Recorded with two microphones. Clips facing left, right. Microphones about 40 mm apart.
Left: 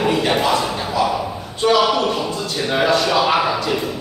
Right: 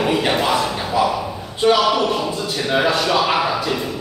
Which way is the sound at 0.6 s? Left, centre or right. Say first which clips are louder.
Right 1 dB; centre.